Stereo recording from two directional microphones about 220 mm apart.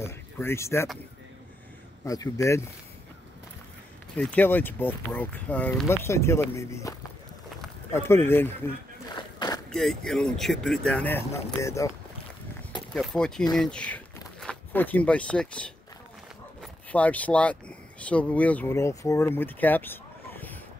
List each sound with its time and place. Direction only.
0.0 s speech: 10° left (ahead or behind)
2.0 s speech: 15° left (ahead or behind)
4.2 s speech: 5° left (ahead or behind)
9.1 s a sound: 20° left (ahead or behind)
9.7 s speech: centre (ahead or behind)
12.9 s speech: 5° left (ahead or behind)